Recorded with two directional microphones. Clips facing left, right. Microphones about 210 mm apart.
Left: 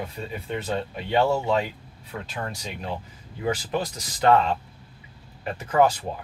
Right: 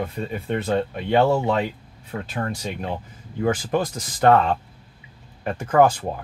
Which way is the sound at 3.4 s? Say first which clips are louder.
Right 5 dB; 50° right (ahead or behind).